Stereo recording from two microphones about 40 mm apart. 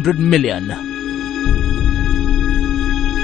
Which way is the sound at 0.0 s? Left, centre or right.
Centre.